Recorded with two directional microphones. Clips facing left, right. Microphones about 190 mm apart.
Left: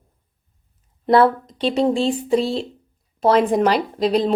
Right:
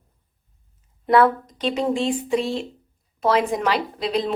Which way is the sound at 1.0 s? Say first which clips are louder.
Left 2 dB; 30° left (ahead or behind).